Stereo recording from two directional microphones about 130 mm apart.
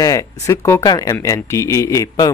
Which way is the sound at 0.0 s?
25° left (ahead or behind).